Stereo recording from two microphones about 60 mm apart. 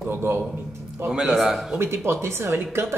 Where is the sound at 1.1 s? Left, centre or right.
Centre.